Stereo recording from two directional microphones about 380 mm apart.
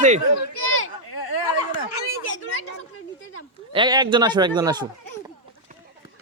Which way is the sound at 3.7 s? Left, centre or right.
Centre.